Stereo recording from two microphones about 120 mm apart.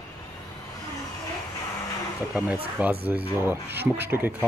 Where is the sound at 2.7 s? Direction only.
15° right (ahead or behind).